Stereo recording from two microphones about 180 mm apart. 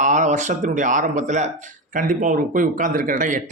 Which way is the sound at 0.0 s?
40° right (ahead or behind).